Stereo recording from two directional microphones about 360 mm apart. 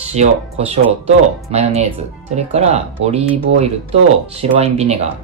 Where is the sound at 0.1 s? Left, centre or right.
Centre.